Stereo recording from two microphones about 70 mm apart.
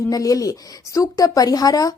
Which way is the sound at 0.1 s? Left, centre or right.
Left.